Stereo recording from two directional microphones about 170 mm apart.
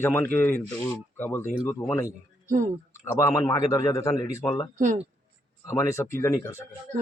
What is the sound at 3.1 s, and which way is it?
Speech, 20° left (ahead or behind).